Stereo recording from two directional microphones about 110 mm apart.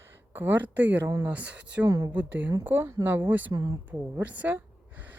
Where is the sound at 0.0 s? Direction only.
20° right (ahead or behind).